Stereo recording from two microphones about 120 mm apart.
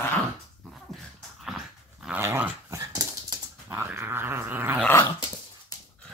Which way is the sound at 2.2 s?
20° right (ahead or behind).